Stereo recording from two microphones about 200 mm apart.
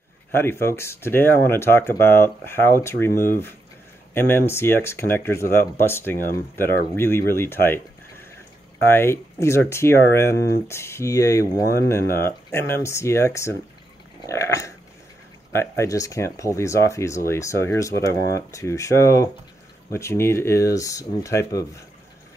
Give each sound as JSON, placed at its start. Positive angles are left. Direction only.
{"t": 0.3, "sound": "speech", "side_deg": 10}
{"t": 4.1, "sound": "speech", "side_deg": 10}
{"t": 8.8, "sound": "speech", "side_deg": 10}